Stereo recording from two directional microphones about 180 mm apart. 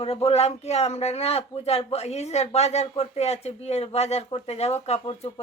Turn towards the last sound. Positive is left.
turn(degrees=30)  # may be behind; listen again after turning